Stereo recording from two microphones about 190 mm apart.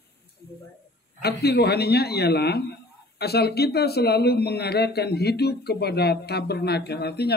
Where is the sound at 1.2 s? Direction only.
60° left (ahead or behind).